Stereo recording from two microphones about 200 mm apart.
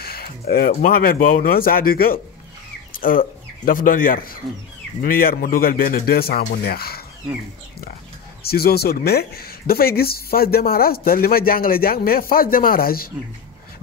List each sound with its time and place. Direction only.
0.0 s speech: 50° left (ahead or behind)
8.4 s speech: 50° left (ahead or behind)